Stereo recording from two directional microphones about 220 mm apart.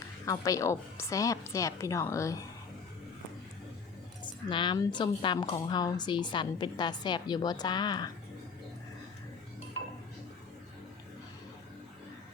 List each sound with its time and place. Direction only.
0.3 s a woman's voice: 15° left (ahead or behind)
4.2 s a woman's voice: 20° left (ahead or behind)